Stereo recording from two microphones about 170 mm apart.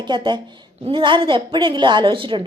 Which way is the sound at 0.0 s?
25° right (ahead or behind).